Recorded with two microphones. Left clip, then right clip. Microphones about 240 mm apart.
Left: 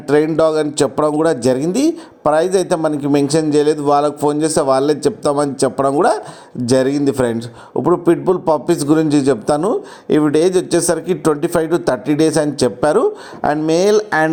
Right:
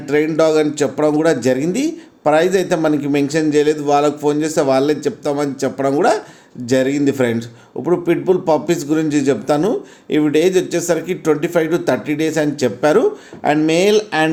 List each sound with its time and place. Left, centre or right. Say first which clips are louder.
0.1 s a man's voice: left 1 dB; left